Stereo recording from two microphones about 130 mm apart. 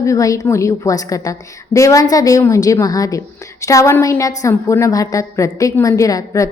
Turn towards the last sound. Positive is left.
turn(degrees=25)  # may be behind; listen again after turning